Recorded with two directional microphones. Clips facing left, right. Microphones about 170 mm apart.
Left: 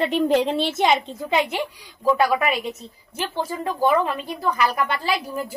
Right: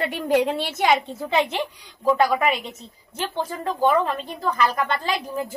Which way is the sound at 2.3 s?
5° left (ahead or behind).